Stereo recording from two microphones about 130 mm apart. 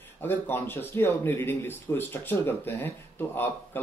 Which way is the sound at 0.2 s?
15° left (ahead or behind).